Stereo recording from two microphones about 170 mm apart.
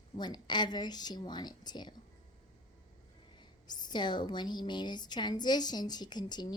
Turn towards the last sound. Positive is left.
turn(degrees=25)  # may be behind; listen again after turning